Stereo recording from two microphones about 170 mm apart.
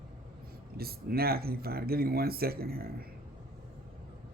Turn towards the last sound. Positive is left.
turn(degrees=-65)  # may be behind; listen again after turning